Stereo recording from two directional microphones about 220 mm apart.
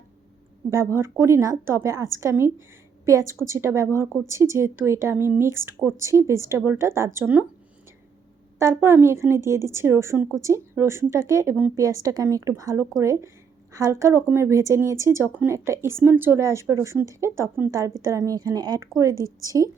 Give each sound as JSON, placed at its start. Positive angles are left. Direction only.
{"t": 0.7, "sound": "speech", "side_deg": -10}
{"t": 8.5, "sound": "speech", "side_deg": -10}